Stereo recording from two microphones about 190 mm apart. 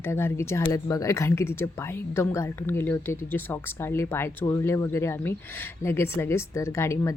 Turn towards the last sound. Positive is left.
turn(degrees=15)  # may be behind; listen again after turning